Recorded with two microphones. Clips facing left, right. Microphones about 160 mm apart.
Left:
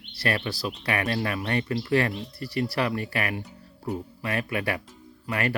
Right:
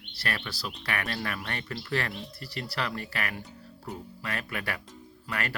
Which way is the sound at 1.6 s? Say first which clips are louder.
Left 7 dB; 20° left (ahead or behind).